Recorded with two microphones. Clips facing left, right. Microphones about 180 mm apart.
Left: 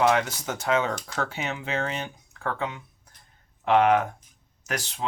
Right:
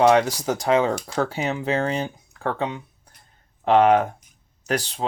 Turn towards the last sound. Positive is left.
turn(degrees=-35)  # may be behind; listen again after turning